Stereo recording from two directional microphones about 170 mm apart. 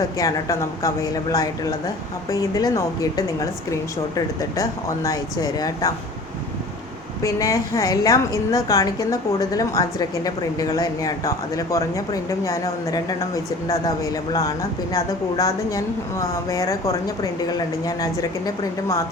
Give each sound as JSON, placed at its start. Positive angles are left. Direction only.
{"t": 0.2, "sound": "a woman's voice", "side_deg": 20}
{"t": 7.2, "sound": "a woman's voice", "side_deg": 20}